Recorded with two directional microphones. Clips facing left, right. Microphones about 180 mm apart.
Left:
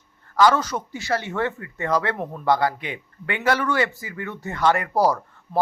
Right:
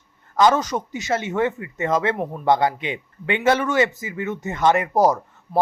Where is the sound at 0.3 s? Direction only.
20° right (ahead or behind).